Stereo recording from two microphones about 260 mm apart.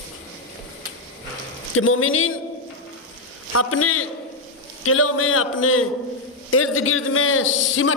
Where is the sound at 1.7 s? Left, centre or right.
Left.